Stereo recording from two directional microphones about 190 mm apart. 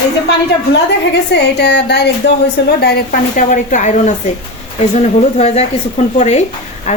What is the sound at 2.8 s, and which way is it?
A woman's voice, 50° left (ahead or behind).